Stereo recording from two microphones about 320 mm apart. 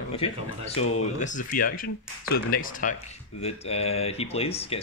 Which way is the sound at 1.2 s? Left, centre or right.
Left.